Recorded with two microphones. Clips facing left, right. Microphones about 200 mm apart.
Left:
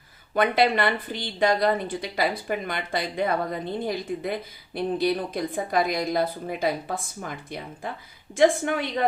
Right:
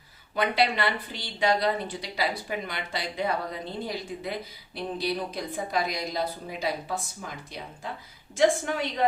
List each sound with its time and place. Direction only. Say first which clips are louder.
0.3 s a woman's voice: left 4 dB; 50° left (ahead or behind)